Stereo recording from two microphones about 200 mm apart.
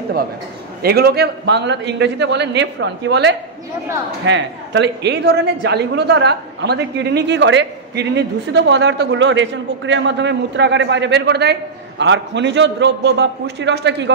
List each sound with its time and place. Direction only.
0.8 s a man's voice: 50° right (ahead or behind)